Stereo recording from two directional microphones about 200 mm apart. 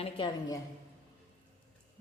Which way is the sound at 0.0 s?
25° left (ahead or behind).